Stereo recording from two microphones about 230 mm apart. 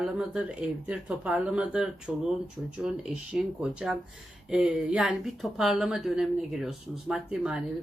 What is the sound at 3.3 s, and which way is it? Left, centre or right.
A woman's voice, centre.